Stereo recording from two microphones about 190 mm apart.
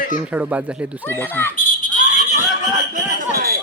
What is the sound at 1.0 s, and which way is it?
Speech, 10° left (ahead or behind).